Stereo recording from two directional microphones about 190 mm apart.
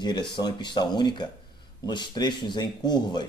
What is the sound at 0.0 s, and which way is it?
Speech, 20° left (ahead or behind).